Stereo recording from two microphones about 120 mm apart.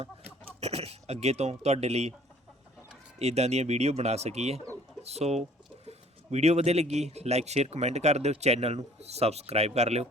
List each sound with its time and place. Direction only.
0.6 s speech: 60° right (ahead or behind)
3.2 s speech: 60° right (ahead or behind)